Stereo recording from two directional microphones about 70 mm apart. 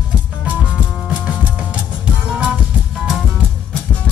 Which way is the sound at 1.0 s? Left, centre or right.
Centre.